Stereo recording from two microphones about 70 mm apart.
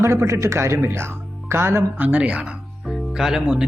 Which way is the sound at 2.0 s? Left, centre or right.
Centre.